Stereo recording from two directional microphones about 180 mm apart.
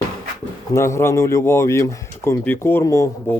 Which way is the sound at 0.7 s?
15° left (ahead or behind).